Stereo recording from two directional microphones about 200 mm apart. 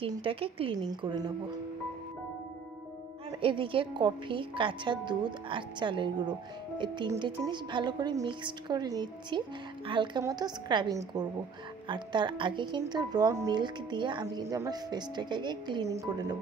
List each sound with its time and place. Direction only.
0.0 s speech: 25° right (ahead or behind)
3.3 s speech: 25° right (ahead or behind)